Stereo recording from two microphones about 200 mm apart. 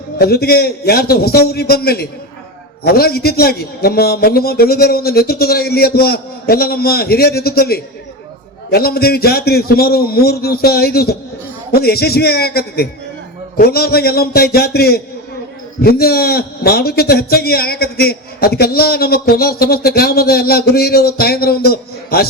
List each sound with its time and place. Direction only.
0.2 s a man's voice: 50° left (ahead or behind)